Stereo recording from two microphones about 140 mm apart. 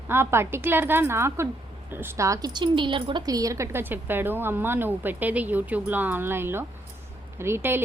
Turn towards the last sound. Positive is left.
turn(degrees=-15)  # may be behind; listen again after turning